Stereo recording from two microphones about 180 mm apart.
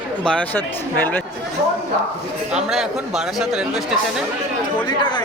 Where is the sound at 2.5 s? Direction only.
Centre (ahead or behind).